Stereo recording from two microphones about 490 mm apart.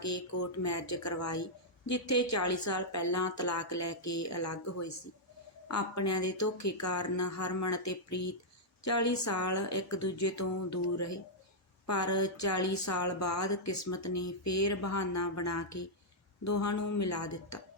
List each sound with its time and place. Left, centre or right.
0.0 s speech: left